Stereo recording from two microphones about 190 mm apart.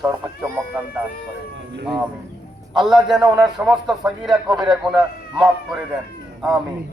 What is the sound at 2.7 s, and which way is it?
Speech, centre (ahead or behind).